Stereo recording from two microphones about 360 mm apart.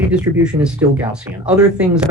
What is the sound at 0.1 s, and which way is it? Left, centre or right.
Speech, centre.